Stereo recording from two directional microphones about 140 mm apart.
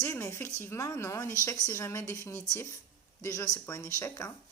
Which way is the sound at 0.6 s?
20° left (ahead or behind).